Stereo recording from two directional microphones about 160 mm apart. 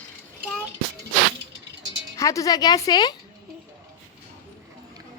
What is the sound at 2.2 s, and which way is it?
Speech, 20° left (ahead or behind).